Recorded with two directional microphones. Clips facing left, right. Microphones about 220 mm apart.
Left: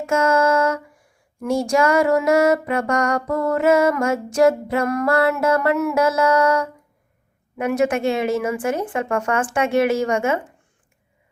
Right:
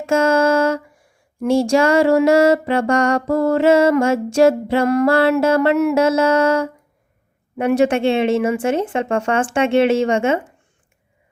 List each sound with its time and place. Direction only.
0.0 s music: 30° right (ahead or behind)